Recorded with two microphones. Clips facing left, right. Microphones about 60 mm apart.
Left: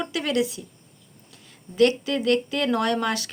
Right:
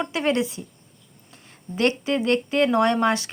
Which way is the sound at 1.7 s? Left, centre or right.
Right.